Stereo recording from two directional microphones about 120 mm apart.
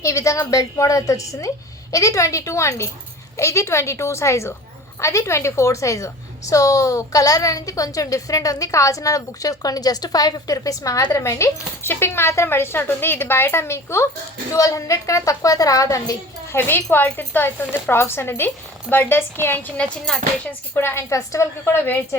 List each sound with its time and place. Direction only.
0.0 s a woman's voice: 25° left (ahead or behind); by 20.1 s 10° left (ahead or behind)
20.7 s a woman's voice: 20° left (ahead or behind)